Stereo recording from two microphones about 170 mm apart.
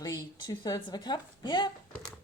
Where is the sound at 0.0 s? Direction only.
25° left (ahead or behind).